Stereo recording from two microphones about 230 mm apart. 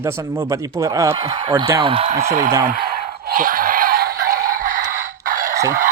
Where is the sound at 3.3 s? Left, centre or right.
Right.